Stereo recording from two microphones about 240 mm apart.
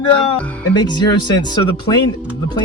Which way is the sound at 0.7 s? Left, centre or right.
Centre.